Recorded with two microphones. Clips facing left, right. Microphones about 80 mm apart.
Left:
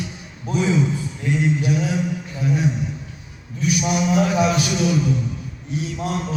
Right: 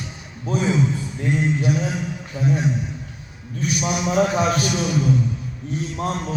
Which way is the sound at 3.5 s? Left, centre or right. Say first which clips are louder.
Left 3 dB; right.